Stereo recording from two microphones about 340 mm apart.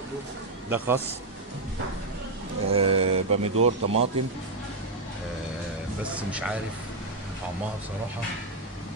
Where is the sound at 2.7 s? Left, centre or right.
Centre.